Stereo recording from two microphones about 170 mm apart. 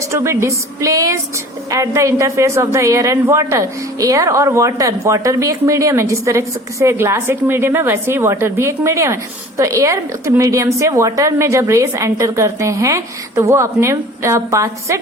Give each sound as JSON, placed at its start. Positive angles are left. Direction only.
{"t": 0.1, "sound": "speech", "side_deg": -15}